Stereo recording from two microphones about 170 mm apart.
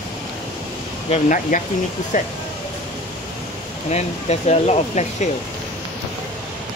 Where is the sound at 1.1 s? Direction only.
50° left (ahead or behind).